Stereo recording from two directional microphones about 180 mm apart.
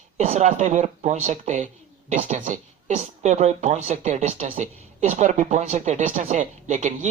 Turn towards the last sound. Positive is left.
turn(degrees=-40)  # may be behind; listen again after turning